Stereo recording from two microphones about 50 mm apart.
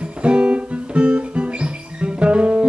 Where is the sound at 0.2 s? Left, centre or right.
Right.